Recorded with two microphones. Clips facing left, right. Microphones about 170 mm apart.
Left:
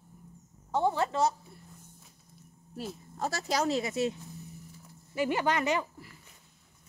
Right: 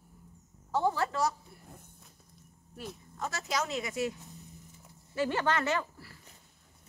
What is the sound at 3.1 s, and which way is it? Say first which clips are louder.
Speech: left 3 dB; 35° left (ahead or behind).